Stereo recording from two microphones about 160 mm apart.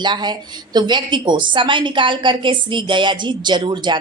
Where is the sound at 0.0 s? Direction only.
25° right (ahead or behind).